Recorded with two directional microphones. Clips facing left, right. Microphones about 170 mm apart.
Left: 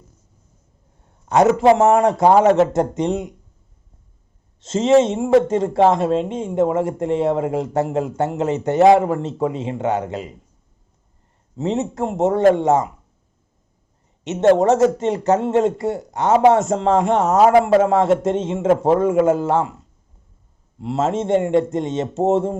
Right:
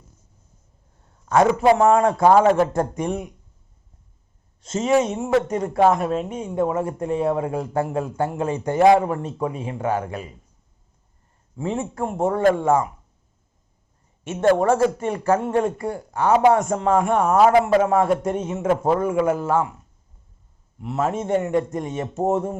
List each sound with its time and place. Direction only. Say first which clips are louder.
1.3 s a man's voice: left 3 dB; 20° left (ahead or behind)
4.6 s a man's voice: left 5 dB; 25° left (ahead or behind)
11.5 s a man's voice: left 4 dB; 25° left (ahead or behind)
14.3 s a man's voice: left 4 dB; 25° left (ahead or behind)